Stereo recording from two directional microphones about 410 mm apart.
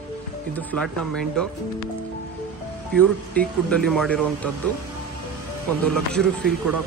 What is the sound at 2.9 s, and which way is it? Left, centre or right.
A man's voice, centre.